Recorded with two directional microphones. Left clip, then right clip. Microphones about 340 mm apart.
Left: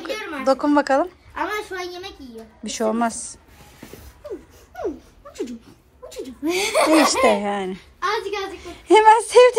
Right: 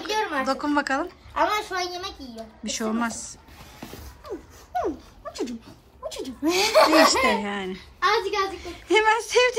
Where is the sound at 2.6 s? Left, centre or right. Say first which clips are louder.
Left 6 dB; centre.